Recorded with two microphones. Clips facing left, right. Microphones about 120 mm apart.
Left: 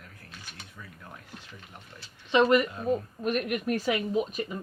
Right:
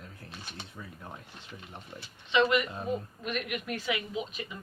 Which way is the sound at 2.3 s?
45° left (ahead or behind).